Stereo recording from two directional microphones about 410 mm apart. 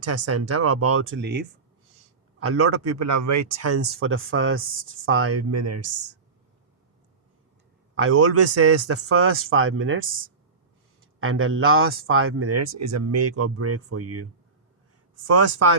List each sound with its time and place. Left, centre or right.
0.0 s speech: right
7.9 s speech: right